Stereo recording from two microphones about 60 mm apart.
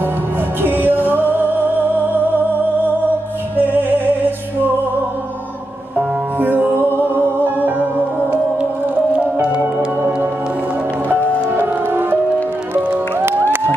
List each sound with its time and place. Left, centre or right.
0.6 s music: right
3.7 s music: right
5.9 s music: right
9.4 s music: centre
11.1 s music: right